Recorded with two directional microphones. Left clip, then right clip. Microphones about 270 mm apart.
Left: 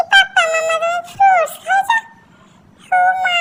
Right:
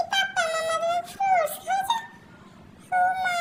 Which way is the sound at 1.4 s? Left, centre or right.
Left.